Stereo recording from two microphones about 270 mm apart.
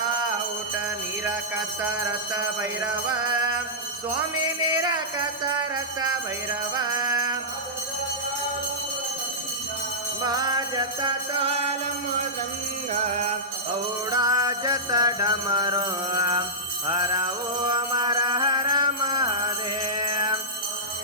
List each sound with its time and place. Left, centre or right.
2.3 s jingle bell: centre
3.1 s music: centre
4.7 s music: centre
10.2 s music: centre
12.9 s music: right
14.1 s music: centre
16.8 s mantra: centre